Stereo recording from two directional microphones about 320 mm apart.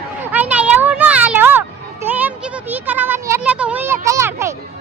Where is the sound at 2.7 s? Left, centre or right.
Centre.